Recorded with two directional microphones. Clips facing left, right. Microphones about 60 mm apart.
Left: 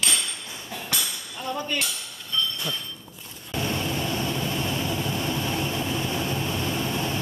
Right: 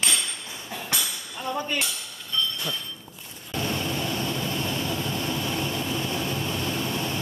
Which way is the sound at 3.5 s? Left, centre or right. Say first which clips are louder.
Left 1 dB; centre.